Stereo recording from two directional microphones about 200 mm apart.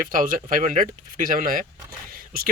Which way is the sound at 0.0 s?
45° right (ahead or behind).